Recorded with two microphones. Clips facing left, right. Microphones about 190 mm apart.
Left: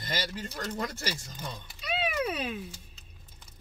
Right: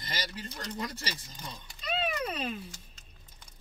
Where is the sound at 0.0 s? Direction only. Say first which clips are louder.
Left 4 dB; 45° left (ahead or behind).